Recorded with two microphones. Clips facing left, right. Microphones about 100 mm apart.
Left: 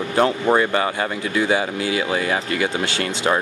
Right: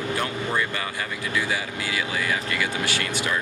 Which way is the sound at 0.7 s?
35° left (ahead or behind).